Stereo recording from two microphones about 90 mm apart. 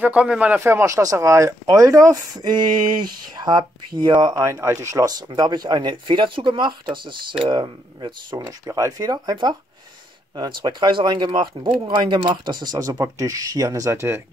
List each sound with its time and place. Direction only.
0.0 s speech: 15° right (ahead or behind)
0.6 s speech: 30° right (ahead or behind)
2.3 s speech: 55° right (ahead or behind)
4.5 s speech: 30° right (ahead or behind)
5.3 s speech: 55° right (ahead or behind)
8.4 s speech: 40° right (ahead or behind)